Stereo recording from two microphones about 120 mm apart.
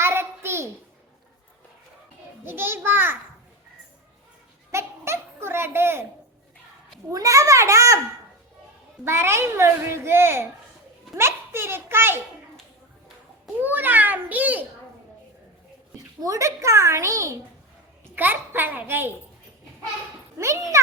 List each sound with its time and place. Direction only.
0.0 s a sound: 20° right (ahead or behind)
2.4 s a child's voice: 20° right (ahead or behind)
4.7 s a sound: 20° right (ahead or behind)
7.1 s a child's voice: 30° right (ahead or behind)
9.0 s a child's voice: 20° right (ahead or behind)
13.6 s a child's voice: 15° right (ahead or behind)
16.2 s a child's voice: 25° right (ahead or behind)
20.4 s a child's voice: 25° right (ahead or behind)